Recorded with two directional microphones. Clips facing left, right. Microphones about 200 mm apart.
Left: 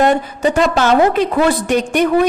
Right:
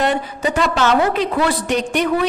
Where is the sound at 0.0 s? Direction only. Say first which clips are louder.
Left 5 dB; 45° left (ahead or behind).